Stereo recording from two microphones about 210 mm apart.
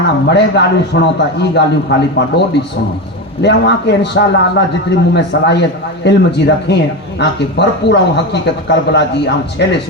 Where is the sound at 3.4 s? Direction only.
55° left (ahead or behind).